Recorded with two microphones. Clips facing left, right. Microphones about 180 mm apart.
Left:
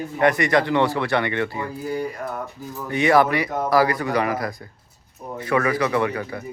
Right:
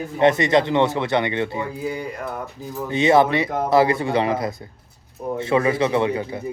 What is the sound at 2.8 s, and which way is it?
Speech, 20° right (ahead or behind).